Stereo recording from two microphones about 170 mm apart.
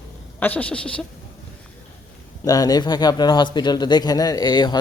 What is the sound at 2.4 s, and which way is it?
Speech, 20° left (ahead or behind).